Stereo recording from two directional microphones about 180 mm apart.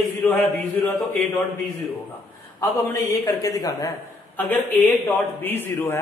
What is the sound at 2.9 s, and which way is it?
Speech, 20° left (ahead or behind).